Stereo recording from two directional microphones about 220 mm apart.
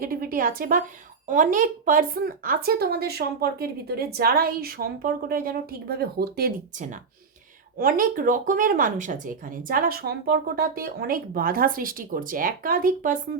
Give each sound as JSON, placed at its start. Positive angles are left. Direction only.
{"t": 0.0, "sound": "speech", "side_deg": -40}